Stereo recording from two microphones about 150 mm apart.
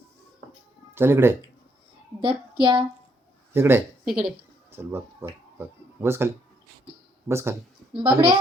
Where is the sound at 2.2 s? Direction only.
35° right (ahead or behind).